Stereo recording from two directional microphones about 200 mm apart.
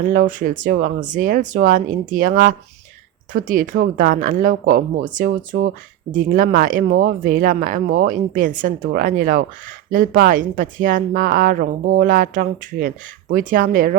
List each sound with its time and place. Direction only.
0.0 s speech: 40° right (ahead or behind)